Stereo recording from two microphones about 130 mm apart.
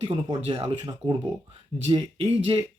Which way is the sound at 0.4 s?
50° right (ahead or behind).